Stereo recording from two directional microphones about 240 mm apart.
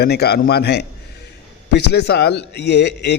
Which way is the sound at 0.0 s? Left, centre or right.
Left.